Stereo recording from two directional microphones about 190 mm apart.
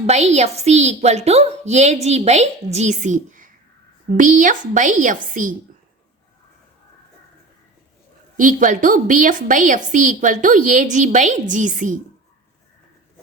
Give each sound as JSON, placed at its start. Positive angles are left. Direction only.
{"t": 0.3, "sound": "a woman's voice", "side_deg": -35}
{"t": 8.4, "sound": "a woman's voice", "side_deg": -45}